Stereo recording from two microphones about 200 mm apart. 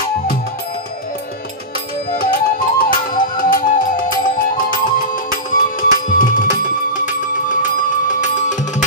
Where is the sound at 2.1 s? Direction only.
45° left (ahead or behind).